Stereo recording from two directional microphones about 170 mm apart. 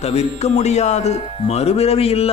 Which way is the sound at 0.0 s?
40° left (ahead or behind).